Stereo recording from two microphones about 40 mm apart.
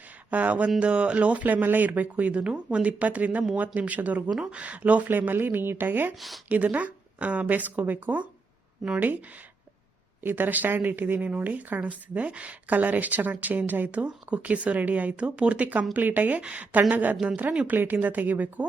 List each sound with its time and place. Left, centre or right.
0.3 s speech: right
5.1 s speech: right
6.1 s speech: centre
6.5 s a woman's voice: right
10.2 s a woman's voice: right
13.9 s speech: right
15.2 s a woman's voice: right
17.2 s speech: right
17.7 s a woman's voice: right